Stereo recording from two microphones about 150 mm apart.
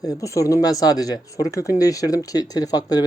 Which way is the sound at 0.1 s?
20° left (ahead or behind).